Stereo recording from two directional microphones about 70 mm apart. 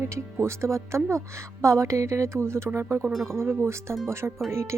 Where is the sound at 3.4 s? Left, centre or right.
Right.